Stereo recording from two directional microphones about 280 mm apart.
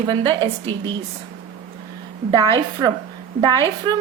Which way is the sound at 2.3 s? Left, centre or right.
Centre.